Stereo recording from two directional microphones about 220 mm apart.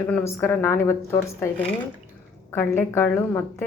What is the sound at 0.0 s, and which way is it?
A woman's voice, 10° left (ahead or behind).